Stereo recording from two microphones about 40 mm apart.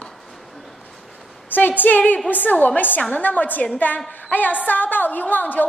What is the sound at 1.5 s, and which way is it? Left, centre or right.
A woman's voice, left.